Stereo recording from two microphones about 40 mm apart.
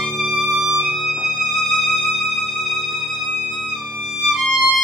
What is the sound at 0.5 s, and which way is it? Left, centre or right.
Music, centre.